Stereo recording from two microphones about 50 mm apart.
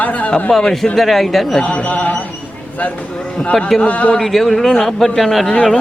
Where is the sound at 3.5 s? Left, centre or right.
Centre.